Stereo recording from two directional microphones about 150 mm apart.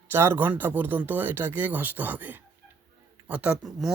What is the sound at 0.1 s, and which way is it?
Speech, 15° right (ahead or behind).